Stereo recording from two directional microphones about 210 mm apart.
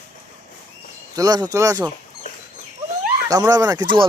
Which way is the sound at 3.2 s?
15° right (ahead or behind).